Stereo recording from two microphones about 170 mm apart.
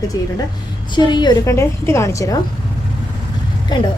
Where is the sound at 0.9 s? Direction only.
25° left (ahead or behind).